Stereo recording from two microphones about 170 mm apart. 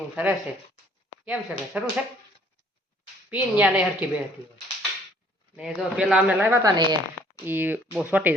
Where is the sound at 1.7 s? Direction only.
10° right (ahead or behind).